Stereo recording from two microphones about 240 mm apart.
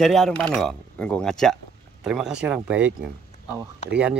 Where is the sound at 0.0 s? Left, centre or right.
Centre.